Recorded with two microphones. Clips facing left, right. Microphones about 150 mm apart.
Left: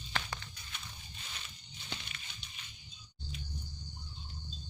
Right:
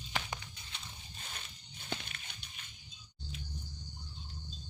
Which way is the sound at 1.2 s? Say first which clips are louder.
Right 3 dB; 50° right (ahead or behind).